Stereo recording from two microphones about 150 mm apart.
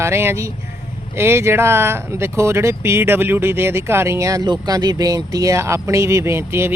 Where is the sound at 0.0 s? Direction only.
15° right (ahead or behind).